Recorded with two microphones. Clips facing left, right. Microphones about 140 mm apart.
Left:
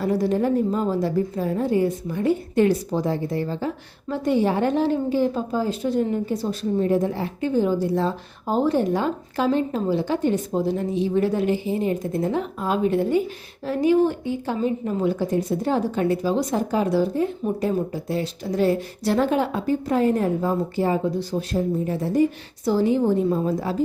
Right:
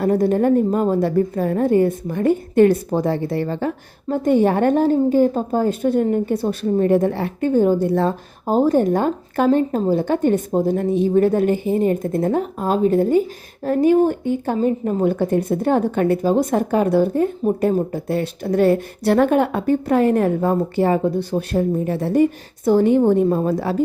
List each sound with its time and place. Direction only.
0.0 s a woman's voice: 50° right (ahead or behind); by 23.8 s 70° right (ahead or behind)